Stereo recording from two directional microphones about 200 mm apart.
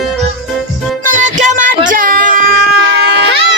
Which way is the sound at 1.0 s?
40° right (ahead or behind).